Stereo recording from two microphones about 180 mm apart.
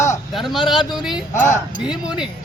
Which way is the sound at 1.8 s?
5° right (ahead or behind).